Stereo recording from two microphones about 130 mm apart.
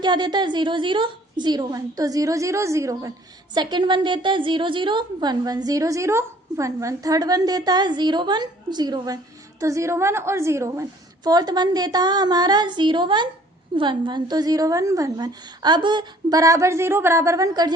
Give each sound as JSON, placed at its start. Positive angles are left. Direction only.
{"t": 0.0, "sound": "a woman's voice", "side_deg": -35}
{"t": 3.5, "sound": "a woman's voice", "side_deg": -35}